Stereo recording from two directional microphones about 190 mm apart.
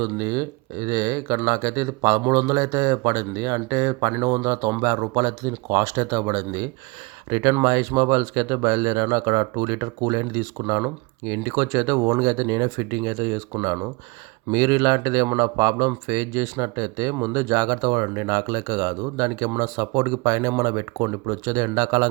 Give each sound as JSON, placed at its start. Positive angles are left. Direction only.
{"t": 0.0, "sound": "speech", "side_deg": -20}